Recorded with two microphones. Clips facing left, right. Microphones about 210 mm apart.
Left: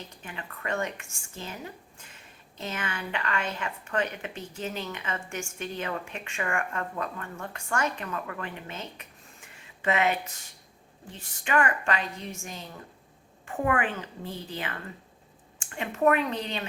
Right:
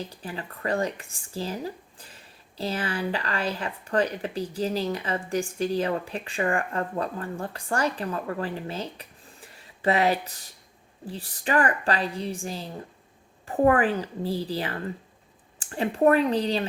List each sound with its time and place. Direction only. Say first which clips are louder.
0.0 s speech: right 7 dB; 35° right (ahead or behind)